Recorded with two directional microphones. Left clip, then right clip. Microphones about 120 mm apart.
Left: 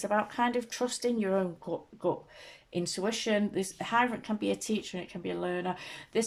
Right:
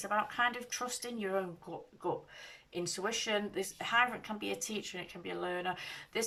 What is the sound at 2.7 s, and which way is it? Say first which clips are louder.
Speech: left 4 dB; 35° left (ahead or behind).